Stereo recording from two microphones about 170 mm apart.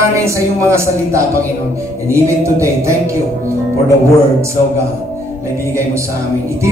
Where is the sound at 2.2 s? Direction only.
15° right (ahead or behind).